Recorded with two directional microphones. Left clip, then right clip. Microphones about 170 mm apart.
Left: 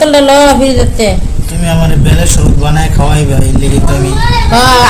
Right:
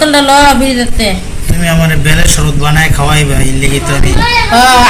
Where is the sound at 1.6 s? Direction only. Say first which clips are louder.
Right 2 dB; centre (ahead or behind).